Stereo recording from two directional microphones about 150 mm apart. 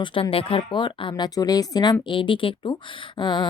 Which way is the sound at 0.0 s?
35° left (ahead or behind).